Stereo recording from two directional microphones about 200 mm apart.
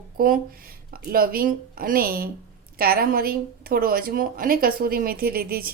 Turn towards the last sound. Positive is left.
turn(degrees=-50)  # may be behind; listen again after turning